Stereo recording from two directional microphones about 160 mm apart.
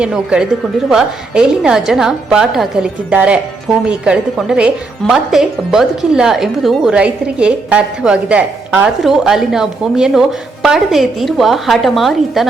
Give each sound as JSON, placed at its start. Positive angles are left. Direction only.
{"t": 0.0, "sound": "speech", "side_deg": -5}